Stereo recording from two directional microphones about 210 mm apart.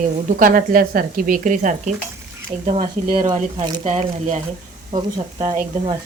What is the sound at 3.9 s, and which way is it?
Speech, 35° right (ahead or behind).